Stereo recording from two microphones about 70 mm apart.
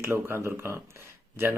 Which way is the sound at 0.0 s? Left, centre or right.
Right.